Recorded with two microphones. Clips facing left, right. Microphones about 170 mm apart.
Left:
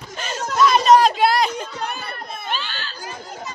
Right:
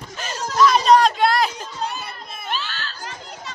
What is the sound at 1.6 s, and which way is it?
Chatter, 60° left (ahead or behind).